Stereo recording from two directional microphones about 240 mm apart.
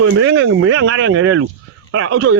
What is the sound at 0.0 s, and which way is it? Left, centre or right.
Speech, right.